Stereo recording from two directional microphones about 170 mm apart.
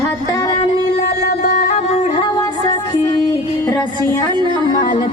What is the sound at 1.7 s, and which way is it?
Music, 40° left (ahead or behind).